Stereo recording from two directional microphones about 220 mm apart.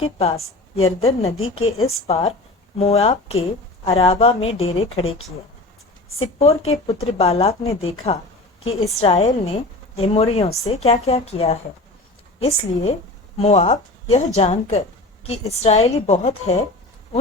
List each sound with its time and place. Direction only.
0.0 s a woman's voice: 30° left (ahead or behind)
6.7 s a woman's voice: 25° left (ahead or behind)